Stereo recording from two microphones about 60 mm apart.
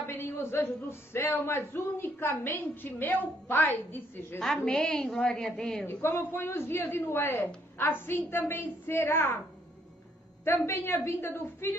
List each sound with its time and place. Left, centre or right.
0.0 s a man's voice: left
4.6 s a woman's voice: centre
5.9 s a man's voice: left
10.4 s a man's voice: left